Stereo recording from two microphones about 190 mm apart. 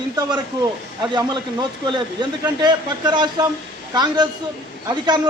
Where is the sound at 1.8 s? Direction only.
20° right (ahead or behind).